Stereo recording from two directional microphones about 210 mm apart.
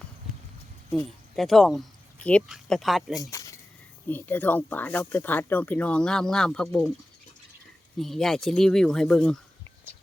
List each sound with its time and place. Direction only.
1.4 s speech: centre (ahead or behind)
3.2 s speech: 15° left (ahead or behind)
7.9 s speech: centre (ahead or behind)